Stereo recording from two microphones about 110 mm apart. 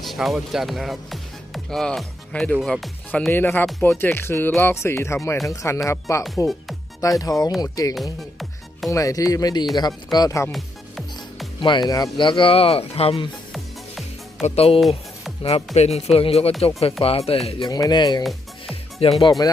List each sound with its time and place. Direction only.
0.0 s speech: centre (ahead or behind)
3.1 s speech: 15° left (ahead or behind); by 7.9 s 35° left (ahead or behind)
8.2 s music: centre (ahead or behind)
8.9 s speech: 30° left (ahead or behind)
10.5 s music: centre (ahead or behind)
11.6 s speech: 40° left (ahead or behind); by 13.2 s 60° left (ahead or behind)
13.5 s music: centre (ahead or behind)
14.4 s speech: 65° left (ahead or behind)
14.8 s music: centre (ahead or behind)
15.4 s speech: 75° left (ahead or behind)
17.7 s speech: 35° left (ahead or behind)
18.2 s music: centre (ahead or behind)
18.7 s music: 65° left (ahead or behind)